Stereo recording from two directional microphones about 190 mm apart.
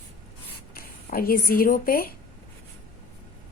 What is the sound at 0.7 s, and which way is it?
Speech, 50° left (ahead or behind).